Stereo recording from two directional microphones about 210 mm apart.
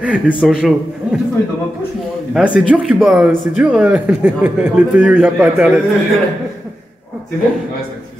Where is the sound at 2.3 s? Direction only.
5° right (ahead or behind).